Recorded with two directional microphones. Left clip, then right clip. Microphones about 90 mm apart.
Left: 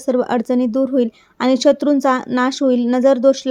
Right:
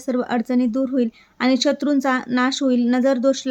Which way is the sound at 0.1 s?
55° left (ahead or behind).